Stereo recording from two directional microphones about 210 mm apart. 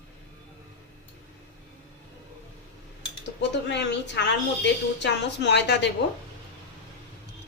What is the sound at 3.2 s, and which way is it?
Speech, 55° left (ahead or behind).